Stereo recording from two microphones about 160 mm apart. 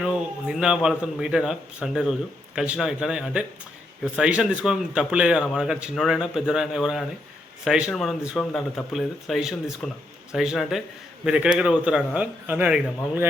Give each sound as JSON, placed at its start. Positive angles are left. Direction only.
{"t": 0.0, "sound": "a man's voice", "side_deg": -5}